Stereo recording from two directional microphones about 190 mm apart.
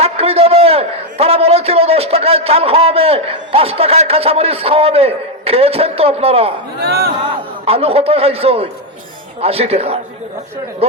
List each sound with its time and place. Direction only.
0.0 s a man's voice: 30° right (ahead or behind)
6.8 s speech: 55° right (ahead or behind)
7.2 s a man's voice: 30° right (ahead or behind)